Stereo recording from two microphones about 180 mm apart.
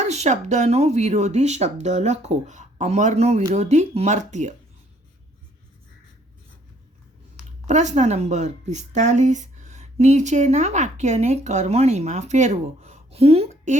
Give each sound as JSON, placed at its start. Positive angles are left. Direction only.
{"t": 0.0, "sound": "speech", "side_deg": -40}
{"t": 7.7, "sound": "speech", "side_deg": -40}